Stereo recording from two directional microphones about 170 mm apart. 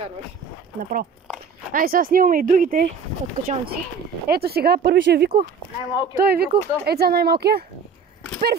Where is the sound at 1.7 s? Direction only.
55° right (ahead or behind).